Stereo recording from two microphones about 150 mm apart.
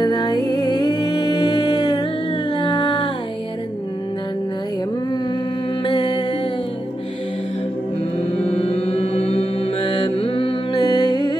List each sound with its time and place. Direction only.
0.0 s music: 25° left (ahead or behind)
2.5 s a sound: 30° left (ahead or behind)
5.9 s music: 30° left (ahead or behind)
8.2 s mantra: 45° left (ahead or behind); by 11.3 s 30° left (ahead or behind)